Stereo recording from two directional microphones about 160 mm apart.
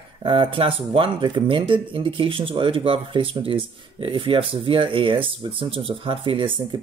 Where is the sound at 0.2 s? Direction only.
30° right (ahead or behind).